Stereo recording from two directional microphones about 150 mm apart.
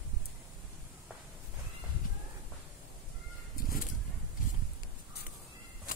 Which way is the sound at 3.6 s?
70° left (ahead or behind).